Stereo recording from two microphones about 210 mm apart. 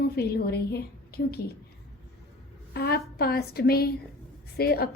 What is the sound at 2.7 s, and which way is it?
A woman's voice, 45° left (ahead or behind).